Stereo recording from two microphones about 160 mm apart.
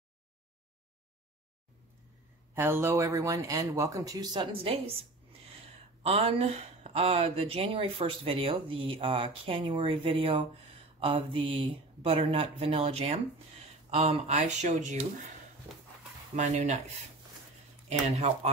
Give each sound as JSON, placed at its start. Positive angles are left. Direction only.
{"t": 2.5, "sound": "speech", "side_deg": -15}
{"t": 6.0, "sound": "speech", "side_deg": -40}
{"t": 16.3, "sound": "speech", "side_deg": -45}
{"t": 18.0, "sound": "speech", "side_deg": -45}